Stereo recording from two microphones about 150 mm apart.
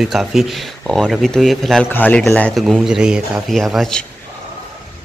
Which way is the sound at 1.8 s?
15° left (ahead or behind).